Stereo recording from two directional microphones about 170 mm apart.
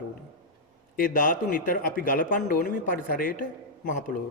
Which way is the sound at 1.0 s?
55° left (ahead or behind).